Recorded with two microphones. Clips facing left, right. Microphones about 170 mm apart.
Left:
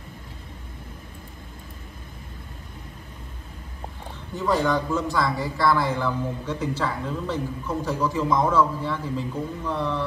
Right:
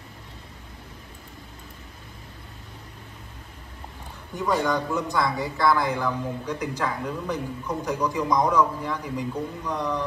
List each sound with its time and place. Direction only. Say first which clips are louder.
4.4 s a man's voice: left 1 dB; 15° right (ahead or behind)